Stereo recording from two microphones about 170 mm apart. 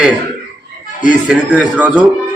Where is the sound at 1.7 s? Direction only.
10° right (ahead or behind).